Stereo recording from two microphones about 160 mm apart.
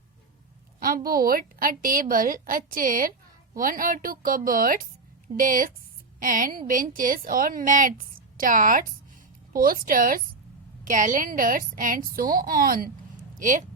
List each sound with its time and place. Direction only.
0.8 s a woman's voice: 65° right (ahead or behind)